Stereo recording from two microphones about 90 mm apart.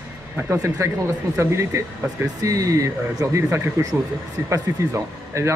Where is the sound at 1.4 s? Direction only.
30° right (ahead or behind).